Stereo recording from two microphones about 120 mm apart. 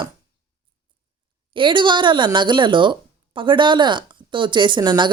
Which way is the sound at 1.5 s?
40° right (ahead or behind).